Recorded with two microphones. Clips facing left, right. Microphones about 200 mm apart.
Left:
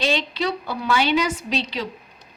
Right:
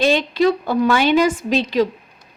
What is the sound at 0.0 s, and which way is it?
A woman's voice, 50° right (ahead or behind).